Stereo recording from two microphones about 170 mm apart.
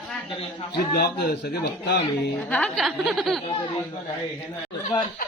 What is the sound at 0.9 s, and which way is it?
Speech, 70° left (ahead or behind).